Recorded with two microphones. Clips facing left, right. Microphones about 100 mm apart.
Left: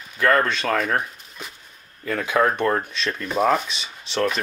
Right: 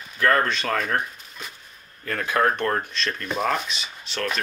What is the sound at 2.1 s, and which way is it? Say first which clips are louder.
Speech: left 2 dB; 10° left (ahead or behind).